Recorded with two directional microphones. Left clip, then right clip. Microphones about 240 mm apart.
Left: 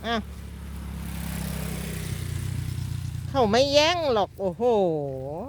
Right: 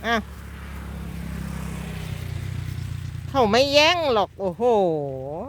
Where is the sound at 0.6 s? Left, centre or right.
Left.